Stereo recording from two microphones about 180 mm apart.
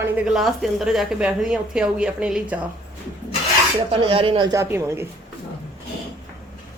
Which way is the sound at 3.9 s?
30° right (ahead or behind).